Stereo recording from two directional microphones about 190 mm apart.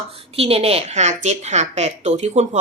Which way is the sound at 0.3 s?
30° right (ahead or behind).